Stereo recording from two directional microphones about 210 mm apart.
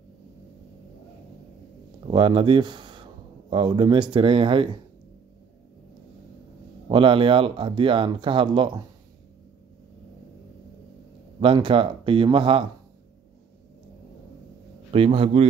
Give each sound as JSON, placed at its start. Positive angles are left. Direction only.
{"t": 2.0, "sound": "speech", "side_deg": -25}
{"t": 6.9, "sound": "speech", "side_deg": -25}
{"t": 11.3, "sound": "speech", "side_deg": -25}
{"t": 14.9, "sound": "speech", "side_deg": -25}